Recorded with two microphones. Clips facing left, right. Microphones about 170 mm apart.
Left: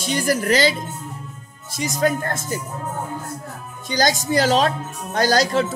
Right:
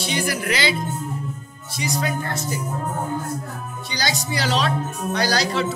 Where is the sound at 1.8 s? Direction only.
45° left (ahead or behind).